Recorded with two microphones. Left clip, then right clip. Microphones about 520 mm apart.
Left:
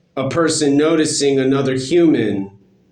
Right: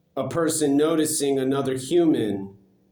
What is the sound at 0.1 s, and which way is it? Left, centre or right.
Speech, right.